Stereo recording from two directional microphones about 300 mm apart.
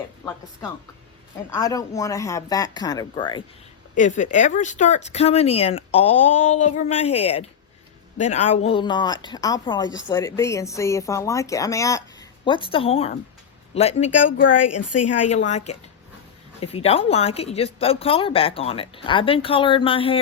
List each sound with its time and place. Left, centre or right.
1.5 s a woman's voice: centre
6.1 s a woman's voice: left
6.5 s a woman's voice: left
14.1 s a woman's voice: left
15.3 s a woman's voice: left